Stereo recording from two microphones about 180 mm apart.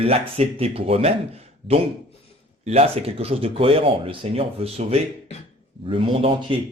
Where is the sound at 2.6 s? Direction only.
35° right (ahead or behind).